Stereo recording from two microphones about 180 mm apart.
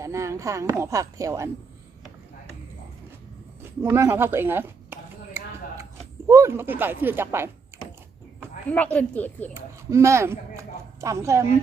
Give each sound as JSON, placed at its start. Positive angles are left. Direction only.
{"t": 0.0, "sound": "speech", "side_deg": -15}
{"t": 3.8, "sound": "a sound", "side_deg": -15}
{"t": 6.2, "sound": "speech", "side_deg": -15}
{"t": 9.0, "sound": "speech", "side_deg": 10}
{"t": 9.6, "sound": "a woman's voice", "side_deg": -15}